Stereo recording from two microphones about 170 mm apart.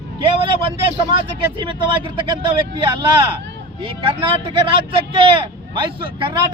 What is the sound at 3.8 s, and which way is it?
Speech, 30° right (ahead or behind).